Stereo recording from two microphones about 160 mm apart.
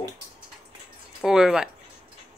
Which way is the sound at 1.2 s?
5° right (ahead or behind).